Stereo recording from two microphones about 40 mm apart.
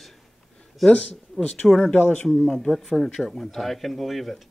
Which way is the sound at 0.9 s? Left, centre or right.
Left.